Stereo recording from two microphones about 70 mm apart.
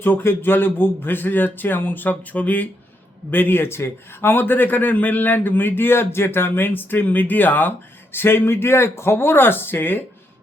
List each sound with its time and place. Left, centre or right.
0.0 s a man's voice: left